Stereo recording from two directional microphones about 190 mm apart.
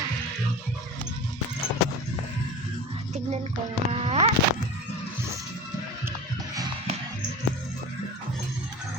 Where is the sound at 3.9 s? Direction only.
30° right (ahead or behind).